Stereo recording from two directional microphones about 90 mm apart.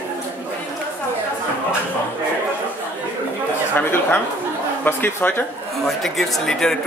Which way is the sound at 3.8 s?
25° left (ahead or behind).